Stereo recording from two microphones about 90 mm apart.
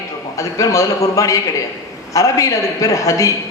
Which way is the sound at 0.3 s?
40° left (ahead or behind).